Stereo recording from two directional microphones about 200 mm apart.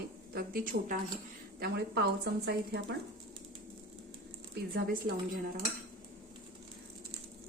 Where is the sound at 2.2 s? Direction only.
55° right (ahead or behind).